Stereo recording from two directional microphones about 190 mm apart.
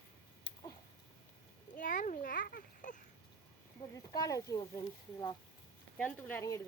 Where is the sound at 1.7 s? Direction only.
45° left (ahead or behind).